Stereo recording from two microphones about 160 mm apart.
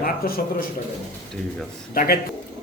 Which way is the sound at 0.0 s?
70° left (ahead or behind).